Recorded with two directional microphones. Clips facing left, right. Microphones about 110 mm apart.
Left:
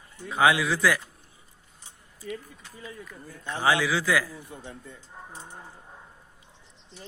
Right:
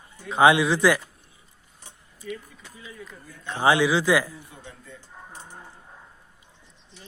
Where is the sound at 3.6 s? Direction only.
20° right (ahead or behind).